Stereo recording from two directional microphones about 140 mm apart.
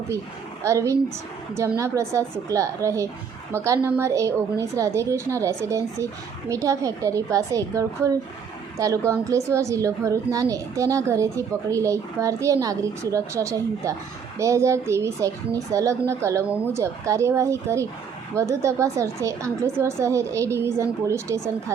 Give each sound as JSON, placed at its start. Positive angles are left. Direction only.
{"t": 0.6, "sound": "a woman's voice", "side_deg": -20}